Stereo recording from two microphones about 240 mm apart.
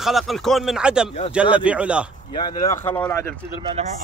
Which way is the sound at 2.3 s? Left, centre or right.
Centre.